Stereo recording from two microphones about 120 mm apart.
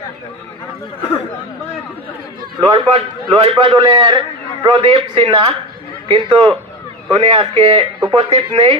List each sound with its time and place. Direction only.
2.6 s a man's voice: 45° right (ahead or behind)